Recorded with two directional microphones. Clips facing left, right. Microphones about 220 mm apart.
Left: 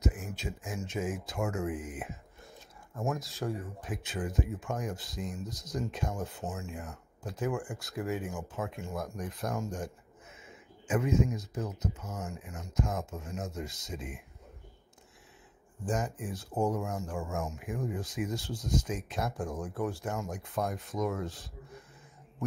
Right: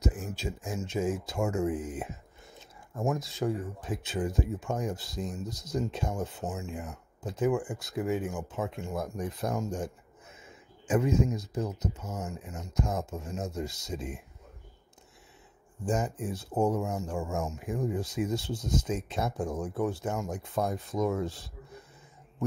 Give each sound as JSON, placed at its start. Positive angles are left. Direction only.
{"t": 0.0, "sound": "speech", "side_deg": -30}
{"t": 3.2, "sound": "speech", "side_deg": 0}
{"t": 3.4, "sound": "speech", "side_deg": -25}
{"t": 10.9, "sound": "speech", "side_deg": -30}
{"t": 15.9, "sound": "speech", "side_deg": -25}